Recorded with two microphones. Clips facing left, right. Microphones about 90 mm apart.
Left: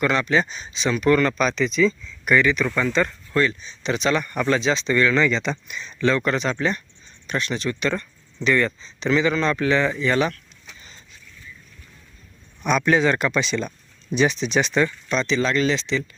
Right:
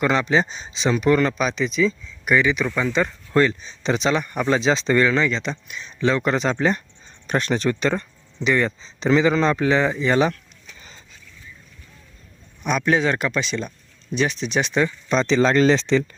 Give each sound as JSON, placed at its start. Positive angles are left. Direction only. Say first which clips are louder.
{"t": 0.0, "sound": "speech", "louder": "right 1 dB", "side_deg": -25}
{"t": 1.1, "sound": "speech", "louder": "even", "side_deg": -10}
{"t": 3.3, "sound": "speech", "louder": "right 3 dB", "side_deg": -35}
{"t": 3.9, "sound": "speech", "louder": "even", "side_deg": -25}
{"t": 4.2, "sound": "speech", "louder": "right 1 dB", "side_deg": -15}
{"t": 5.1, "sound": "speech", "louder": "left 1 dB", "side_deg": 0}
{"t": 6.1, "sound": "speech", "louder": "right 2 dB", "side_deg": -25}
{"t": 8.4, "sound": "speech", "louder": "even", "side_deg": -20}
{"t": 8.8, "sound": "speech", "louder": "right 3 dB", "side_deg": -30}
{"t": 10.8, "sound": "vehicle", "louder": "right 2 dB", "side_deg": -35}
{"t": 12.6, "sound": "speech", "louder": "left 1 dB", "side_deg": -5}
{"t": 15.1, "sound": "speech", "louder": "right 6 dB", "side_deg": -35}